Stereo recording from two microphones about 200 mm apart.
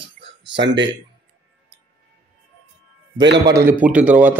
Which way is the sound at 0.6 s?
60° right (ahead or behind).